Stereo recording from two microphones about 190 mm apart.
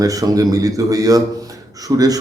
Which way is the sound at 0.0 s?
20° right (ahead or behind).